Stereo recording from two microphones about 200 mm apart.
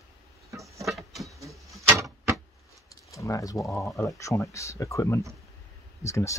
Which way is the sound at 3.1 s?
15° left (ahead or behind).